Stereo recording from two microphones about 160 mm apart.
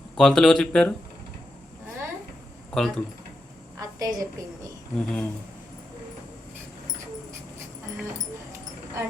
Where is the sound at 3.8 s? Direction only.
20° right (ahead or behind).